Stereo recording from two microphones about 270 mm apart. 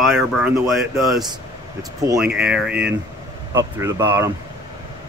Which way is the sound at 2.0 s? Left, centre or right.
Centre.